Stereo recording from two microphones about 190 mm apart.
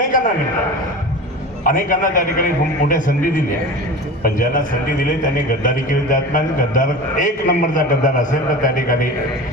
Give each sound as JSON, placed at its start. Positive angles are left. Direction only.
{"t": 0.1, "sound": "a sound", "side_deg": 45}
{"t": 1.6, "sound": "a man's voice", "side_deg": 45}
{"t": 4.2, "sound": "a man's voice", "side_deg": 45}